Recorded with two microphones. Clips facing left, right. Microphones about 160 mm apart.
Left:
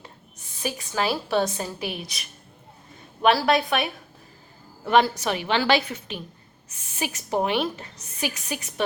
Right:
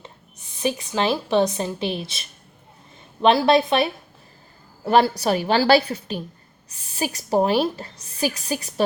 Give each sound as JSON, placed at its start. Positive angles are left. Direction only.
{"t": 0.0, "sound": "a woman's voice", "side_deg": -20}
{"t": 4.9, "sound": "a woman's voice", "side_deg": -35}